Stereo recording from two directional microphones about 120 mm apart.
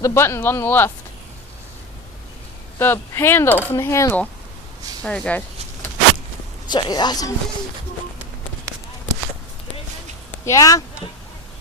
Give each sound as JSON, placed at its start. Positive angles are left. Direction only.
{"t": 0.0, "sound": "speech", "side_deg": 20}
{"t": 2.7, "sound": "speech", "side_deg": 20}
{"t": 5.0, "sound": "speech", "side_deg": 10}
{"t": 6.7, "sound": "speech", "side_deg": 35}
{"t": 10.4, "sound": "speech", "side_deg": 30}